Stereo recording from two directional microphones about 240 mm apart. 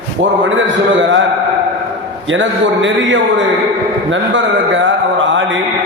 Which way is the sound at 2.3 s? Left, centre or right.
Right.